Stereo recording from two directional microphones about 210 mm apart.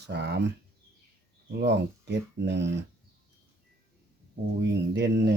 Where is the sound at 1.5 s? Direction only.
50° right (ahead or behind).